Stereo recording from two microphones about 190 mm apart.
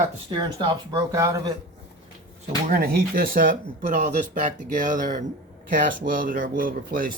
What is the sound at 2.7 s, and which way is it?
Speech, 50° right (ahead or behind).